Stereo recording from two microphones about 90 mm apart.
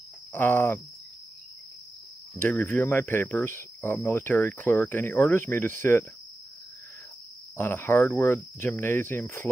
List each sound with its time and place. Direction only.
0.3 s cricket: 20° left (ahead or behind)
2.3 s cricket: 25° left (ahead or behind)
7.5 s cricket: 25° left (ahead or behind)